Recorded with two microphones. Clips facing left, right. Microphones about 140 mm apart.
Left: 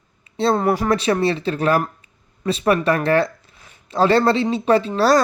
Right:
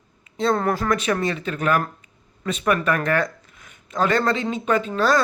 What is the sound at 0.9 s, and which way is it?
Speech, 30° left (ahead or behind).